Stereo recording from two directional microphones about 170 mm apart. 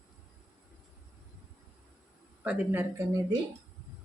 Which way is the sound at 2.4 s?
15° right (ahead or behind).